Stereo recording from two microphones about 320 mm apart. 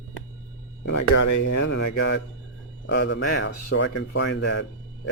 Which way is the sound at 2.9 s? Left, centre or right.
Left.